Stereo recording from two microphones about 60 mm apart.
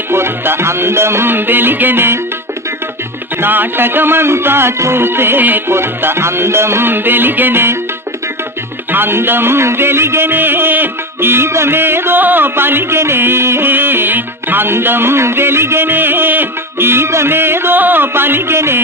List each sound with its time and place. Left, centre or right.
0.1 s music: right
3.3 s music: right
8.9 s music: right